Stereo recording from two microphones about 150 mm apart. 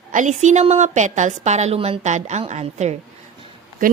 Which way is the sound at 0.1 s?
55° right (ahead or behind).